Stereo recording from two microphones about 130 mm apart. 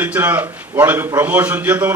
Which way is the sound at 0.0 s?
15° right (ahead or behind).